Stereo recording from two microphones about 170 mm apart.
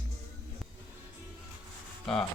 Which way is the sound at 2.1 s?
Centre (ahead or behind).